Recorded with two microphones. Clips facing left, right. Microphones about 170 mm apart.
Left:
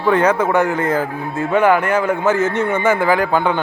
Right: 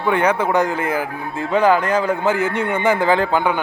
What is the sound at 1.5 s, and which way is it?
Speech, 30° right (ahead or behind).